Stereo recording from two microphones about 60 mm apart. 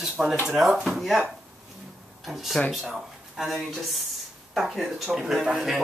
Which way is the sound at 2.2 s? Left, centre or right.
Centre.